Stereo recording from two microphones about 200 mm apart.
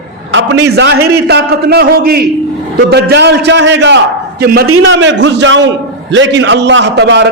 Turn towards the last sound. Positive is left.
turn(degrees=-60)  # may be behind; listen again after turning